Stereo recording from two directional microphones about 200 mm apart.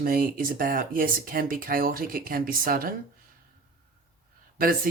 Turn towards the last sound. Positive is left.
turn(degrees=-45)  # may be behind; listen again after turning